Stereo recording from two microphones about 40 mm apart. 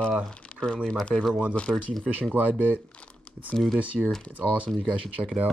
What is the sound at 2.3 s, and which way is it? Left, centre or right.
Speech, right.